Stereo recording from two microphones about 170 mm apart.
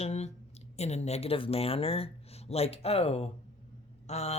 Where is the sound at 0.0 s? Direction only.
40° left (ahead or behind).